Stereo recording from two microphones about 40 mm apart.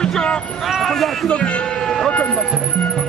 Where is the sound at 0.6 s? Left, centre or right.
Centre.